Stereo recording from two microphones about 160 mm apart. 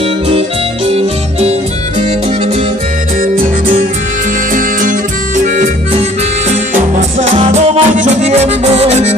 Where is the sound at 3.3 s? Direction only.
60° right (ahead or behind).